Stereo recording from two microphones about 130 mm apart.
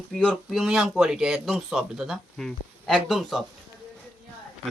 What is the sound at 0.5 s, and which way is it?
Speech, 5° right (ahead or behind).